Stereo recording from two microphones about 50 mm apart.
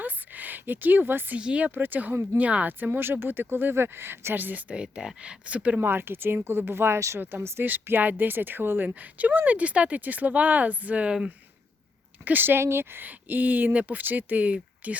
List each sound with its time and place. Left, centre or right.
0.0 s a sound: right
1.4 s speech: centre
1.6 s a woman's voice: right
4.4 s a woman's voice: right
4.7 s speech: centre
5.8 s speech: right
7.6 s a woman's voice: right
12.2 s speech: right
13.1 s a woman's voice: right